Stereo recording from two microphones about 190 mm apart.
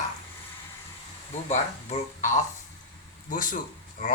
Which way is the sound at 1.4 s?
40° left (ahead or behind).